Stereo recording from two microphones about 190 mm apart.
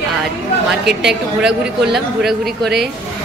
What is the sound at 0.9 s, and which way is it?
Speech, 65° right (ahead or behind).